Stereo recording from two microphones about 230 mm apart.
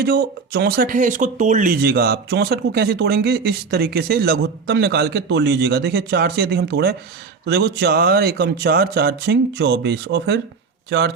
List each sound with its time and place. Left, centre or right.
0.0 s speech: right